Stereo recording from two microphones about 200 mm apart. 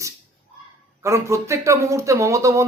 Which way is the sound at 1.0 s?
15° right (ahead or behind).